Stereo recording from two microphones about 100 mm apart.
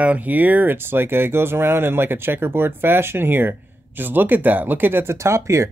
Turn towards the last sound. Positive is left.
turn(degrees=-30)  # may be behind; listen again after turning